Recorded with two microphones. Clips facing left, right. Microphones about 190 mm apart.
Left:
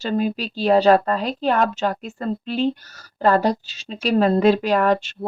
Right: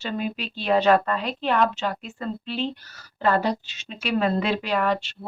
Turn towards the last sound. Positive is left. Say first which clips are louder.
# left 6 dB
turn(degrees=45)  # may be behind; listen again after turning